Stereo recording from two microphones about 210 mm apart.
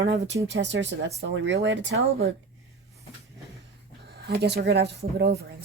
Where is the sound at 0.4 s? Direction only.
55° right (ahead or behind).